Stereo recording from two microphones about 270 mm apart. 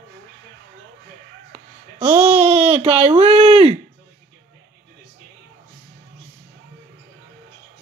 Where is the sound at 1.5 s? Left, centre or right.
Centre.